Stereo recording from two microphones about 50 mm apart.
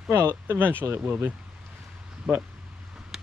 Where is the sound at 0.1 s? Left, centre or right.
Right.